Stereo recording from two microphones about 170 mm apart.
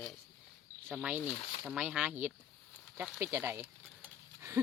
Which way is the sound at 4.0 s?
15° right (ahead or behind).